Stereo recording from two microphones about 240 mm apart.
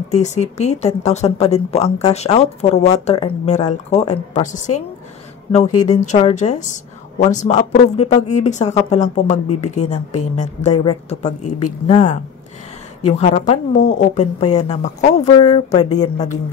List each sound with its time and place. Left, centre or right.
0.1 s a woman's voice: left
10.8 s a woman's voice: centre
11.2 s a woman's voice: left